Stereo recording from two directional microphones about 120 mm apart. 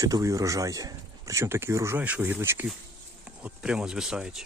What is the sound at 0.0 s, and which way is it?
Speech, 30° right (ahead or behind).